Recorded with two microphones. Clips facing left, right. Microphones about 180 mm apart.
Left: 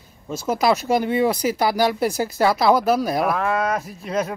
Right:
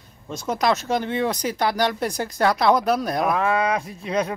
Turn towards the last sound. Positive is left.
turn(degrees=5)  # may be behind; listen again after turning